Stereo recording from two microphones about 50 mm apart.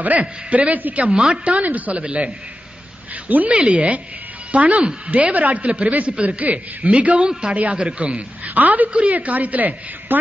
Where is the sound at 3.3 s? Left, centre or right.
Right.